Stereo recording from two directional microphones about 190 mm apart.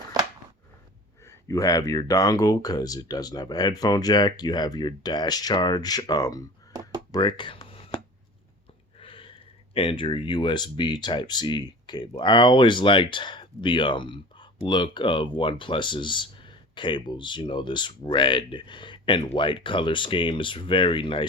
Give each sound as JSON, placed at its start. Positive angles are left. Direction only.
{"t": 1.2, "sound": "speech", "side_deg": 15}
{"t": 7.1, "sound": "a sound", "side_deg": 25}
{"t": 9.7, "sound": "speech", "side_deg": 30}